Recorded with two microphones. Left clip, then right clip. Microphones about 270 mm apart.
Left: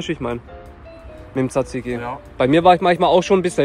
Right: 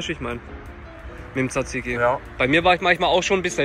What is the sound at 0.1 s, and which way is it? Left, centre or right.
Speech, centre.